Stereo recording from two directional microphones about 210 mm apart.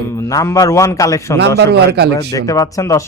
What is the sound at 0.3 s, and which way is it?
Speech, 15° left (ahead or behind).